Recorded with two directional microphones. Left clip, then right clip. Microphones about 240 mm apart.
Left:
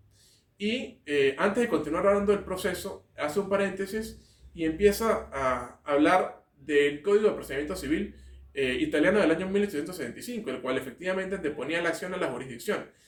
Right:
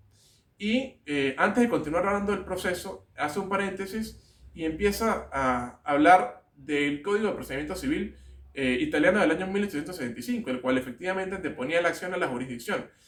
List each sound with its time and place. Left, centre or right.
0.6 s speech: centre